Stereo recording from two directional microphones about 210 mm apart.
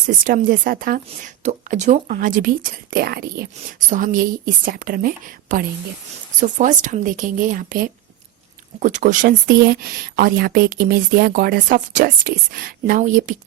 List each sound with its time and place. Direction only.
0.3 s speech: 40° right (ahead or behind)